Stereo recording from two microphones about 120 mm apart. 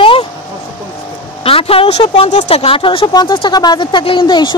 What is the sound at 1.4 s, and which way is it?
Speech, 55° left (ahead or behind).